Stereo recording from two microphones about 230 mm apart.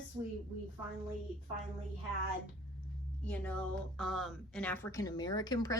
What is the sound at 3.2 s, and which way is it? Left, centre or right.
A woman's voice, centre.